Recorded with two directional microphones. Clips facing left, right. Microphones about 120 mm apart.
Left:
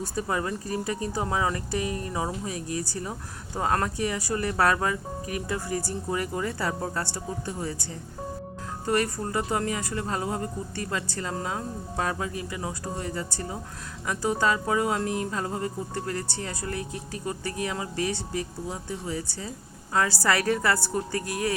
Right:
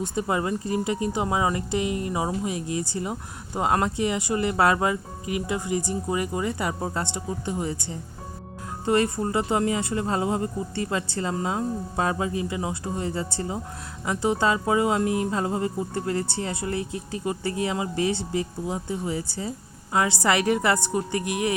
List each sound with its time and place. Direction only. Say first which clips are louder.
0.0 s speech: right 3 dB; 20° right (ahead or behind)
8.9 s speech: right 4 dB; 25° right (ahead or behind)